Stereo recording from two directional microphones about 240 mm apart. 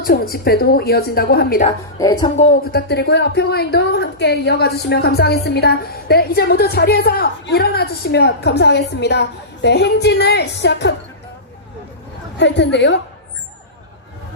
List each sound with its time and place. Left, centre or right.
0.0 s a woman's voice: left
2.0 s speech: centre
2.3 s speech: left
12.4 s speech: left